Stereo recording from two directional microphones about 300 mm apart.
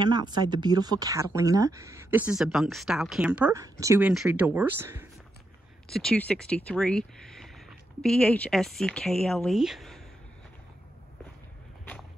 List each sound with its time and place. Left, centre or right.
0.0 s speech: centre